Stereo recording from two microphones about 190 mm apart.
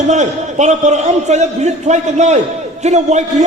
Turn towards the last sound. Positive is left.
turn(degrees=-35)  # may be behind; listen again after turning